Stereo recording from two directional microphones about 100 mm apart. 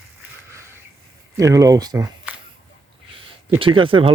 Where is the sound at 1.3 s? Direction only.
35° right (ahead or behind).